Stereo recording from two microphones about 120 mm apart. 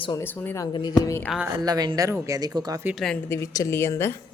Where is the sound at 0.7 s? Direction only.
40° left (ahead or behind).